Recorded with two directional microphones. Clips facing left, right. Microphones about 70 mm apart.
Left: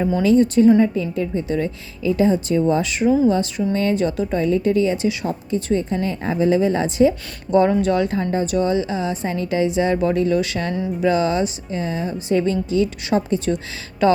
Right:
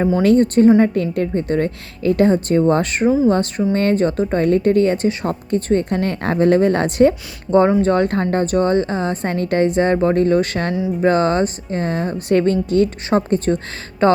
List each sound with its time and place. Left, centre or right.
0.2 s a woman's voice: right
7.8 s a woman's voice: right